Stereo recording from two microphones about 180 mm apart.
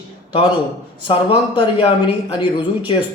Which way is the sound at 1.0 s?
25° left (ahead or behind).